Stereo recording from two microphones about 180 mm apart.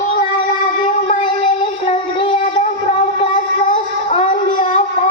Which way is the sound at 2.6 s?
30° left (ahead or behind).